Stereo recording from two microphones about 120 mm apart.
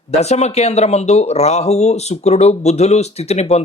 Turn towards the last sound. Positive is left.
turn(degrees=60)  # may be behind; listen again after turning